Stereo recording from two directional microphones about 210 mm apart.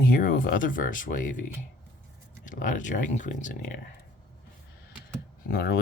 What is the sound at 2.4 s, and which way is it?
Speech, 40° left (ahead or behind).